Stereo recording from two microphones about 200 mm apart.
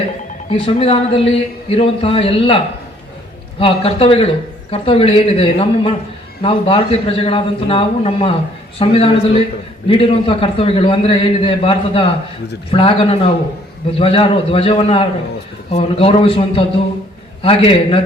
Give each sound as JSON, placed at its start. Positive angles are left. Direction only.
{"t": 0.5, "sound": "a man's voice", "side_deg": 25}
{"t": 3.6, "sound": "a man's voice", "side_deg": 30}